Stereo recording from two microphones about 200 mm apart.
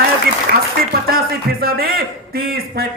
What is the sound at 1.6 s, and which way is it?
Speech, 50° right (ahead or behind).